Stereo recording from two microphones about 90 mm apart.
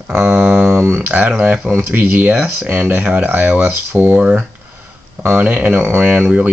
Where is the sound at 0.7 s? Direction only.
25° right (ahead or behind).